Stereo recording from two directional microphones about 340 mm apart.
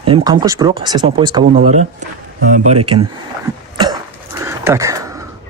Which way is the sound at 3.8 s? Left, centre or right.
Centre.